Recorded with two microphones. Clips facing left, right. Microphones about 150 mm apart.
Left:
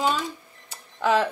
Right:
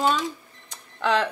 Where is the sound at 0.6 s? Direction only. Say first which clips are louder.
Left 1 dB; 10° left (ahead or behind).